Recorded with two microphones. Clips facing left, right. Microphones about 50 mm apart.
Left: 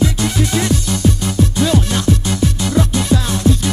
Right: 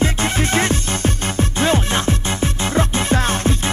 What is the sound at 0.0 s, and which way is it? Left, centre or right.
Music, right.